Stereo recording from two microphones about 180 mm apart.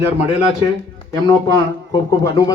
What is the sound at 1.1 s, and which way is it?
Speech, 20° left (ahead or behind).